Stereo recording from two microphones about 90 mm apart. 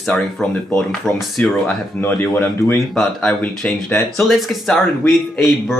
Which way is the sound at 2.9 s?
Centre (ahead or behind).